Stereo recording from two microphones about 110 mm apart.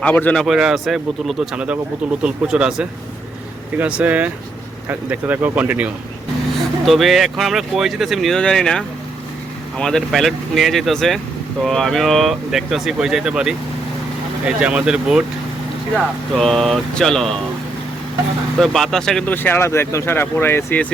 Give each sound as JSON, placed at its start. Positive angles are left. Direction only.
{"t": 0.0, "sound": "a man's voice", "side_deg": 15}
{"t": 0.4, "sound": "speech", "side_deg": -5}
{"t": 6.8, "sound": "speech", "side_deg": 0}
{"t": 16.0, "sound": "speech", "side_deg": 0}
{"t": 18.6, "sound": "speech", "side_deg": 5}
{"t": 19.3, "sound": "speech", "side_deg": 15}